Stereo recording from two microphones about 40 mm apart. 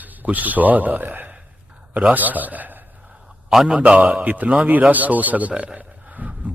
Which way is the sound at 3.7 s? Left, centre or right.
Right.